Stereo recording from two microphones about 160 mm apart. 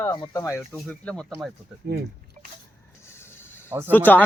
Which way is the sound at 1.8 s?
80° right.